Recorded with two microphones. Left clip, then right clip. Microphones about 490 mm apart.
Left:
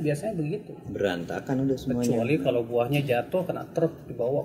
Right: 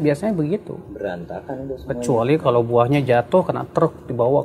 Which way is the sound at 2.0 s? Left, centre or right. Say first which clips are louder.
Right 10 dB; right.